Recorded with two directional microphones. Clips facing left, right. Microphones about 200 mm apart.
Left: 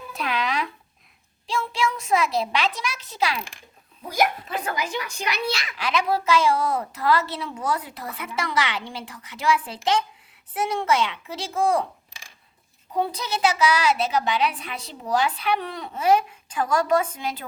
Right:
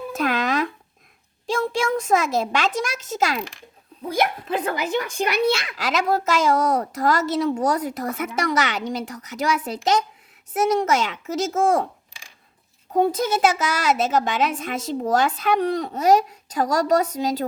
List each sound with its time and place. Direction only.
0.1 s a sound: 45° right (ahead or behind)
1.5 s a child's voice: 45° right (ahead or behind)
4.1 s a child's voice: 55° right (ahead or behind)
12.9 s a child's voice: 45° right (ahead or behind)